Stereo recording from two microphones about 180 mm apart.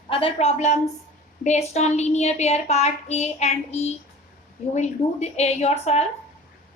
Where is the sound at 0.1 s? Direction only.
30° left (ahead or behind).